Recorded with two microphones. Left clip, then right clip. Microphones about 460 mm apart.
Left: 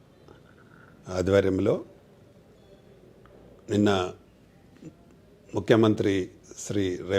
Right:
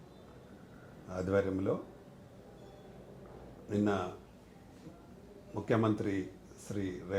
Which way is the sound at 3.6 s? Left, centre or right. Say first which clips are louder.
Left 9 dB; left.